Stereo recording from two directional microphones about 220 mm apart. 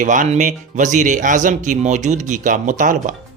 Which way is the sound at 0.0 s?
35° right (ahead or behind).